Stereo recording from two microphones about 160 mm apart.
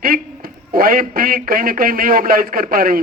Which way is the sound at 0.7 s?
65° right (ahead or behind).